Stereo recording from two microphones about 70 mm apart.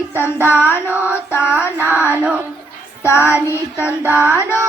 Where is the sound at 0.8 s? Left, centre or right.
Right.